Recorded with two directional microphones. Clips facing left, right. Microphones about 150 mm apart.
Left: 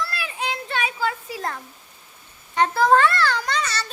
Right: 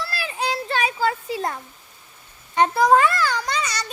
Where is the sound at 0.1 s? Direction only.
35° right (ahead or behind).